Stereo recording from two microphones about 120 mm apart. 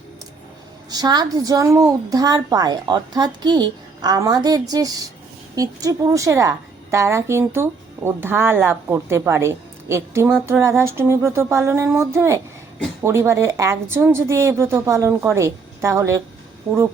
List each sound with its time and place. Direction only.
0.9 s a woman's voice: 35° right (ahead or behind)